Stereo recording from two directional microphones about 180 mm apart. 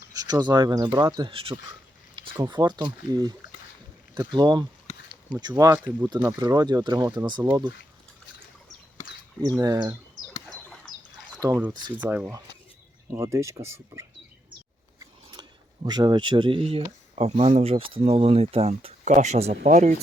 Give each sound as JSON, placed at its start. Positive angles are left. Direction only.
{"t": 0.1, "sound": "speech", "side_deg": -20}
{"t": 9.6, "sound": "speech", "side_deg": -20}
{"t": 10.4, "sound": "bird", "side_deg": 5}
{"t": 11.3, "sound": "speech", "side_deg": -20}
{"t": 11.9, "sound": "speech", "side_deg": -10}